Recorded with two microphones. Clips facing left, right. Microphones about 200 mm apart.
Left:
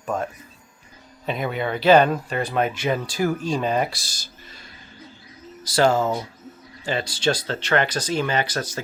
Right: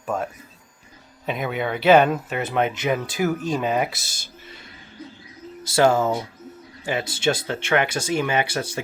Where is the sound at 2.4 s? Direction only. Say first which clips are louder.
Right 1 dB; 20° right (ahead or behind).